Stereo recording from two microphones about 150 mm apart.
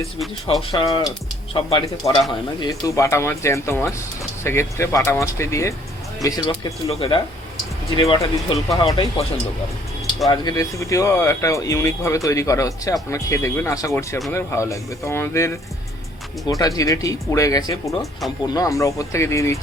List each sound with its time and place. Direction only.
0.7 s speech: 30° left (ahead or behind)
8.1 s speech: 30° left (ahead or behind)
10.2 s speech: 25° left (ahead or behind)
17.8 s speech: centre (ahead or behind)
18.4 s speech: 25° left (ahead or behind)